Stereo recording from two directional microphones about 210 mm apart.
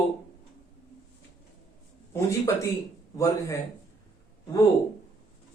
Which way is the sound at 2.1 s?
15° left (ahead or behind).